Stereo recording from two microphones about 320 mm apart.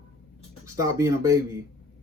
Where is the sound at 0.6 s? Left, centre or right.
Centre.